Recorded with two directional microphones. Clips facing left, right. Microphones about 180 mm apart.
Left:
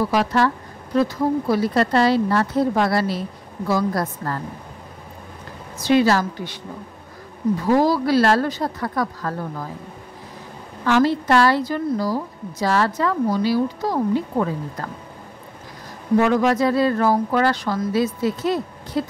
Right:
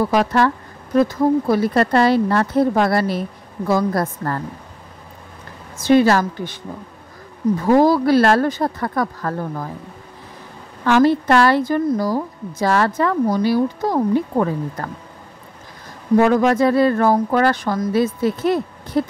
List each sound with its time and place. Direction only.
0.0 s a woman's voice: 50° right (ahead or behind)
5.8 s a woman's voice: 50° right (ahead or behind)
7.6 s a woman's voice: 50° right (ahead or behind)
10.9 s a woman's voice: 55° right (ahead or behind)
16.2 s a woman's voice: 45° right (ahead or behind)